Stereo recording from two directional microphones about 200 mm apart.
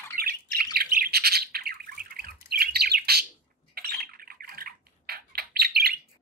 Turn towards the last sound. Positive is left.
turn(degrees=-50)  # may be behind; listen again after turning